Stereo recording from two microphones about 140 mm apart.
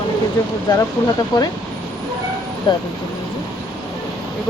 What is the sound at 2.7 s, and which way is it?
Speech, 30° left (ahead or behind).